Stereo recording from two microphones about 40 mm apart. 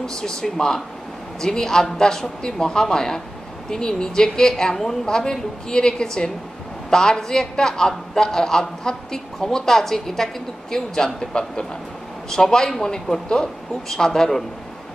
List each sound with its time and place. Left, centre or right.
0.0 s a man's voice: centre